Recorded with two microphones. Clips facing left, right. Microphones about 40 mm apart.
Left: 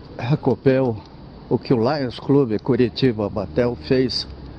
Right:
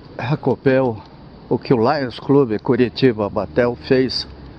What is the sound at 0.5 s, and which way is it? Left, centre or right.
Speech, centre.